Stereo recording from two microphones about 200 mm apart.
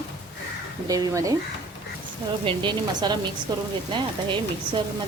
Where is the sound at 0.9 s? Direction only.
20° right (ahead or behind).